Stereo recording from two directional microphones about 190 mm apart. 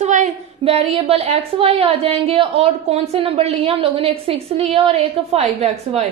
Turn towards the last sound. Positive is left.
turn(degrees=-35)  # may be behind; listen again after turning